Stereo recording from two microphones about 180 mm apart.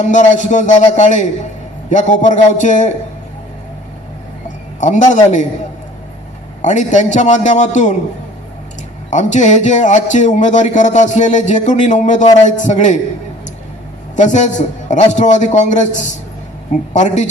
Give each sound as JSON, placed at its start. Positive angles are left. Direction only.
{"t": 0.0, "sound": "speech", "side_deg": 40}
{"t": 4.8, "sound": "speech", "side_deg": 40}
{"t": 6.6, "sound": "a man's voice", "side_deg": 40}
{"t": 9.0, "sound": "a man's voice", "side_deg": 40}
{"t": 14.2, "sound": "a man's voice", "side_deg": 40}